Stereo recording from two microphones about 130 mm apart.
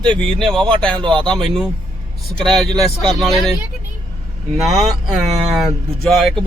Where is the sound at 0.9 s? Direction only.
40° right (ahead or behind).